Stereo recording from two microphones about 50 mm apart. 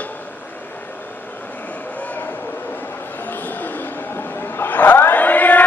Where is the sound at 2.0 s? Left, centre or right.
Left.